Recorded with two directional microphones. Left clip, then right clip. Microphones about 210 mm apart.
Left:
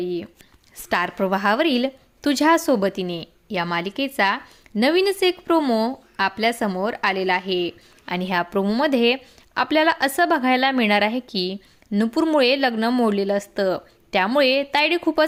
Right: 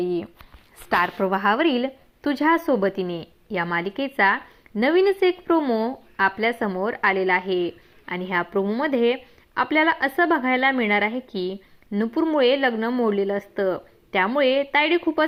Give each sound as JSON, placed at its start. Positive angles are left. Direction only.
{"t": 0.0, "sound": "speech", "side_deg": 5}
{"t": 0.9, "sound": "a woman's voice", "side_deg": 20}
{"t": 8.0, "sound": "speech", "side_deg": 35}